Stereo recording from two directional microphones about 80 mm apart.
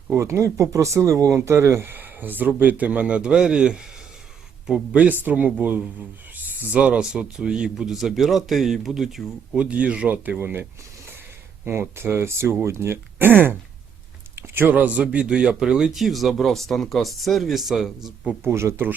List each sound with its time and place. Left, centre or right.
0.2 s speech: right; by 3.8 s centre
4.9 s speech: right; by 9.2 s centre
9.6 s speech: centre
18.4 s speech: right